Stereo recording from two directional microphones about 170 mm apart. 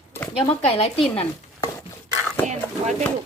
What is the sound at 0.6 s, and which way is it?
Speech, 35° left (ahead or behind).